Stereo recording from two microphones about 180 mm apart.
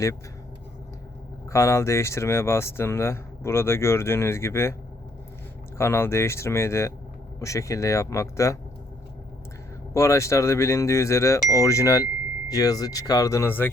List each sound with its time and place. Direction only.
1.5 s speech: 15° left (ahead or behind)
5.7 s speech: 15° left (ahead or behind)
9.9 s speech: 15° left (ahead or behind)